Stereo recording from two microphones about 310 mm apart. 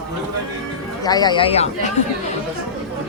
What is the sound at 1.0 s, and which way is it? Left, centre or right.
Speech, centre.